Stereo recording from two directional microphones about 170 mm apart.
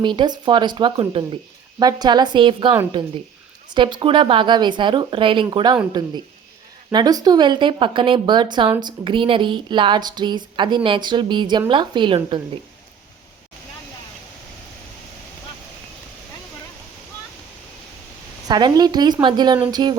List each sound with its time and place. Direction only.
0.0 s speech: 25° right (ahead or behind)
18.4 s speech: 25° right (ahead or behind)